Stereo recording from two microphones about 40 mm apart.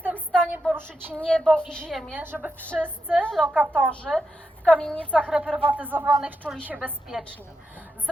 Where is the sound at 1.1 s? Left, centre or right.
Left.